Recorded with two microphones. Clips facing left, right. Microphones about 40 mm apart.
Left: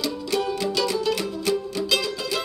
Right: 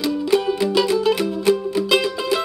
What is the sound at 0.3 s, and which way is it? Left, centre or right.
Music, right.